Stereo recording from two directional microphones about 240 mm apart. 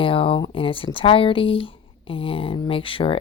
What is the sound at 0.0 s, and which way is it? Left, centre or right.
Speech, left.